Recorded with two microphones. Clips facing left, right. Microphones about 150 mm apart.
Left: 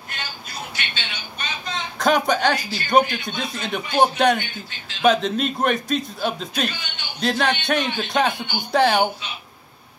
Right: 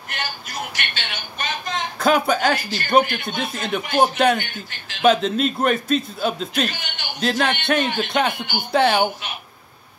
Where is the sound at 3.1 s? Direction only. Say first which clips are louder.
Right 2 dB; 55° right (ahead or behind).